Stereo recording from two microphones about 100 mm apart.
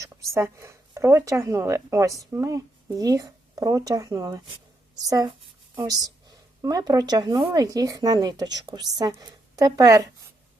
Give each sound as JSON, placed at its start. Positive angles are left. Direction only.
{"t": 0.0, "sound": "speech", "side_deg": -30}